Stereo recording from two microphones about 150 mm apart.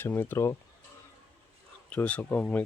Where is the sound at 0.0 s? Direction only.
15° left (ahead or behind).